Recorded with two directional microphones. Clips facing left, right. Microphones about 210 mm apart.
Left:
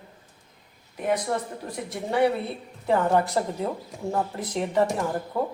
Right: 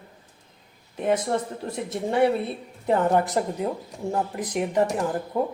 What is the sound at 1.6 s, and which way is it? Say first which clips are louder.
A woman's voice: right 4 dB; 25° right (ahead or behind).